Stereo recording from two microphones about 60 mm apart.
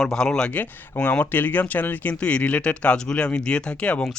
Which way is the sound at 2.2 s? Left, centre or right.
Left.